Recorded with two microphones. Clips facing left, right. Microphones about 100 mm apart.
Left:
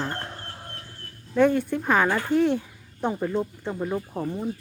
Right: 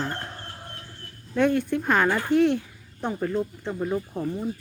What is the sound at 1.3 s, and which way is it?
Speech, 10° left (ahead or behind).